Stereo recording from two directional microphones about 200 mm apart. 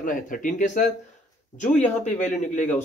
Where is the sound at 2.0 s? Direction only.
40° left (ahead or behind).